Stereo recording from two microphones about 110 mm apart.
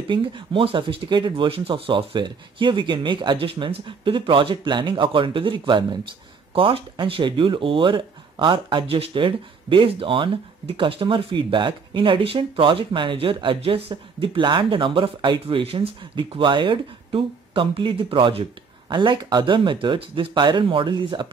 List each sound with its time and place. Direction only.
0.1 s speech: 45° right (ahead or behind)
15.4 s speech: 60° right (ahead or behind); by 21.3 s 45° right (ahead or behind)